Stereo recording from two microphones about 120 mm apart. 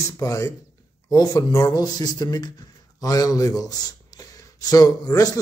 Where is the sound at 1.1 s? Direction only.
35° left (ahead or behind).